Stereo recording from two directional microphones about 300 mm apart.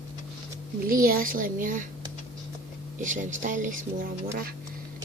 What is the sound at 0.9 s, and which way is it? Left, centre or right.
Speech, right.